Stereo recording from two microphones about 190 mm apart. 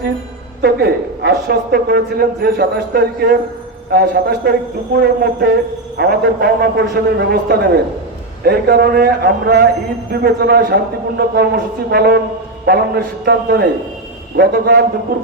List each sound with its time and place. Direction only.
0.6 s a woman's voice: 55° right (ahead or behind)